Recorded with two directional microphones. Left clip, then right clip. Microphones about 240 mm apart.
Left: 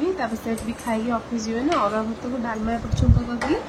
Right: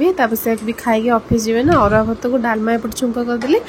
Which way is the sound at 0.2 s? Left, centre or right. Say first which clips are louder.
Right 10 dB; right.